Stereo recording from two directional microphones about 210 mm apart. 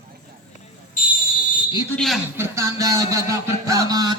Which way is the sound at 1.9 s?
5° left (ahead or behind).